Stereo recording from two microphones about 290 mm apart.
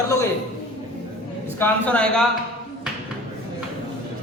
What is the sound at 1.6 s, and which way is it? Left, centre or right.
Speech, centre.